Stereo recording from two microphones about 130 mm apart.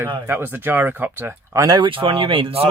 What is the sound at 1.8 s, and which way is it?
Speech, 40° right (ahead or behind).